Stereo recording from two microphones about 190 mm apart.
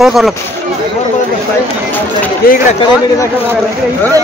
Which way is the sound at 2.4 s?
50° left (ahead or behind).